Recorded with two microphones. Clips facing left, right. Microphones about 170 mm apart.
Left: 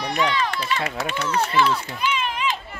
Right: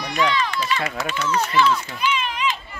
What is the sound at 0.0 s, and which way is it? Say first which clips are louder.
Speech: right 1 dB; 60° left (ahead or behind).